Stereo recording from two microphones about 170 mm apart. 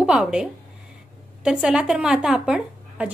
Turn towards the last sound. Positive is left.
turn(degrees=-5)  # may be behind; listen again after turning